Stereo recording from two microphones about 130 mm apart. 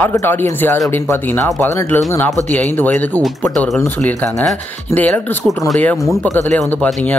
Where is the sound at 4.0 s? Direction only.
15° left (ahead or behind).